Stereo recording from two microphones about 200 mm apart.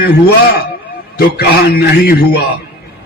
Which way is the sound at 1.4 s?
50° left (ahead or behind).